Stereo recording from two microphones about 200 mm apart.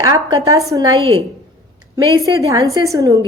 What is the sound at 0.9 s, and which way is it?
Speech, 25° right (ahead or behind).